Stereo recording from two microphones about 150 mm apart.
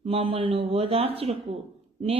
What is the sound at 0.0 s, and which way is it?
Speech, 40° right (ahead or behind).